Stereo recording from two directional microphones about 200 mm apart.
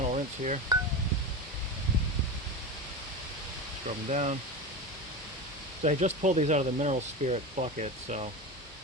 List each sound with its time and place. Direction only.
0.1 s a sound: 35° right (ahead or behind)
3.8 s speech: 35° right (ahead or behind)
5.8 s speech: 35° right (ahead or behind)